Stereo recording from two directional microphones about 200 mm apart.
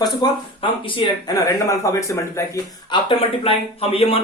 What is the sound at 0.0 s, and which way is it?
Speech, 20° left (ahead or behind).